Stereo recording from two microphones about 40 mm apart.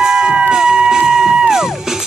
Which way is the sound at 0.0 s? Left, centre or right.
Right.